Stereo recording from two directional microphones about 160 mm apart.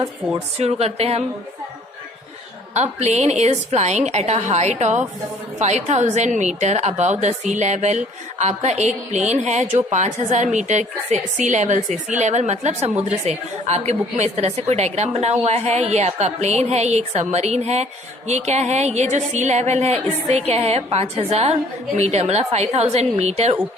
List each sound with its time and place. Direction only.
0.3 s a woman's voice: 40° right (ahead or behind)
2.7 s a woman's voice: 45° right (ahead or behind)